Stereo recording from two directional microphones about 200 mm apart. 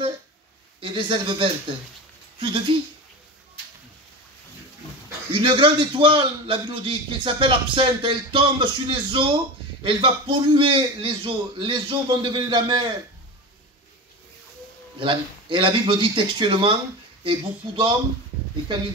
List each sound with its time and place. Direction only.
0.7 s a man's voice: 25° right (ahead or behind)
5.3 s a man's voice: 25° right (ahead or behind)
15.0 s a man's voice: 25° right (ahead or behind)